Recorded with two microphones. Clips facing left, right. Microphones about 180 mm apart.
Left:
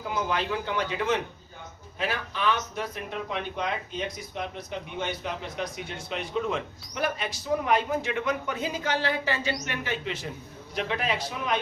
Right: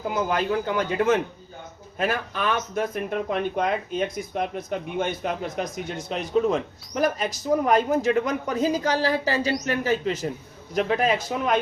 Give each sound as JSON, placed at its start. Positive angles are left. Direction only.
{"t": 0.1, "sound": "a man's voice", "side_deg": -45}